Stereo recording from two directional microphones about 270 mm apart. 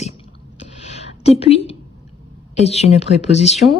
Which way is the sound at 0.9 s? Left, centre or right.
Left.